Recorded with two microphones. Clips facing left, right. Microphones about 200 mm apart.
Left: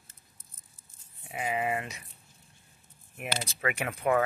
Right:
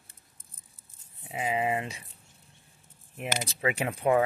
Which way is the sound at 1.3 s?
25° right (ahead or behind).